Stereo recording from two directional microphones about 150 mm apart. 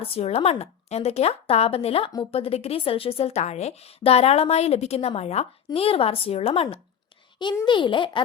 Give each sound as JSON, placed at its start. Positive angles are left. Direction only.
{"t": 0.0, "sound": "a woman's voice", "side_deg": 40}
{"t": 7.6, "sound": "a child's voice", "side_deg": 30}